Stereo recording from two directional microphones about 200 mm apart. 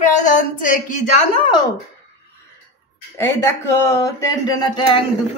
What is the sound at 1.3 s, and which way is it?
Speech, 25° left (ahead or behind).